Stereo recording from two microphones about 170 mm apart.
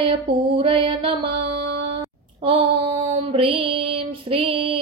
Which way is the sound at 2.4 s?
35° right (ahead or behind).